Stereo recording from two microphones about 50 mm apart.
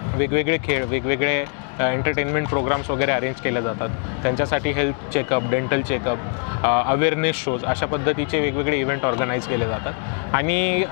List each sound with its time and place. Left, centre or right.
0.2 s speech: left